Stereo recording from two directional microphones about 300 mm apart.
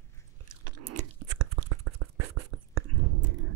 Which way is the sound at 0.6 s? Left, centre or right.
Right.